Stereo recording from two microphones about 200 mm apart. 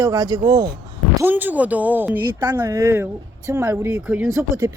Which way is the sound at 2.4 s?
20° right (ahead or behind).